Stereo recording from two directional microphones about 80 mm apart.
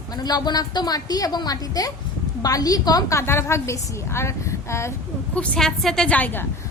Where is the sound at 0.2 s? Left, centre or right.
Left.